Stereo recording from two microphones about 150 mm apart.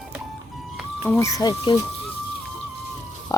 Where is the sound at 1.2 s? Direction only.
20° left (ahead or behind).